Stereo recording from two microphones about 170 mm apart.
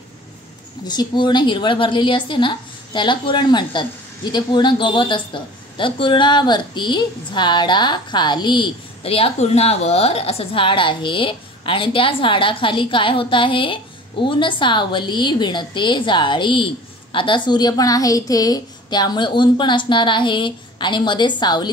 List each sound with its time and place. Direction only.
0.8 s a woman's voice: 25° left (ahead or behind)